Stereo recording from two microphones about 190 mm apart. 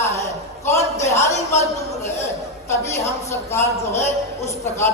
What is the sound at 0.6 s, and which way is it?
Speech, 15° left (ahead or behind).